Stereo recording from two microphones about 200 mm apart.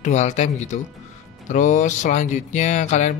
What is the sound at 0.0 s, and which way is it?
Speech, 35° left (ahead or behind).